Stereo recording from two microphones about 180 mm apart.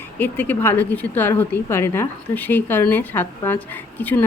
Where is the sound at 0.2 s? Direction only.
10° left (ahead or behind).